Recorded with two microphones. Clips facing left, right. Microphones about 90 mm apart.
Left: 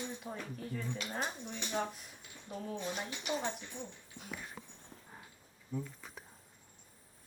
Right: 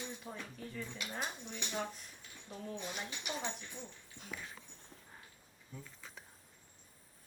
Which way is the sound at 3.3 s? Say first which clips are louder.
Left 6 dB; 15° left (ahead or behind).